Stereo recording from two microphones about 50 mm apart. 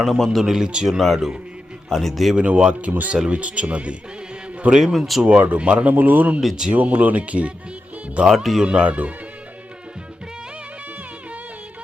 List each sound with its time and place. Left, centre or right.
0.0 s a man's voice: centre
2.3 s speech: right
4.8 s a man's voice: centre
5.2 s speech: right